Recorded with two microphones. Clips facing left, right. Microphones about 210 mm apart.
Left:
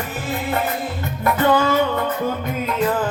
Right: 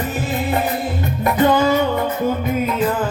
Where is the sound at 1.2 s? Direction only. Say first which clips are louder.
Right 2 dB; 15° right (ahead or behind).